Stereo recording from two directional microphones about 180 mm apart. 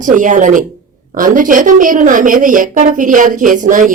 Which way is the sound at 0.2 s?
45° right (ahead or behind).